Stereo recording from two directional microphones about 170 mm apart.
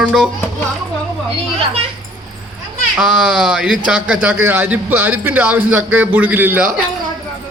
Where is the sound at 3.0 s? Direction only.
5° right (ahead or behind).